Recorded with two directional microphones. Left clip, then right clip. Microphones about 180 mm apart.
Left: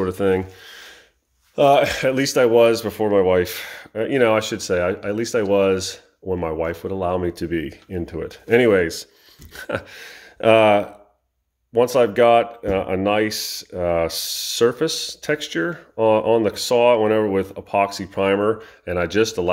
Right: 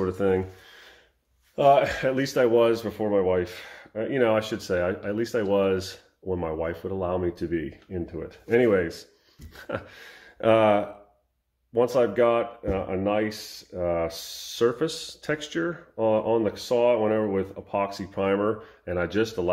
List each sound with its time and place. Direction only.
0.0 s speech: 40° left (ahead or behind)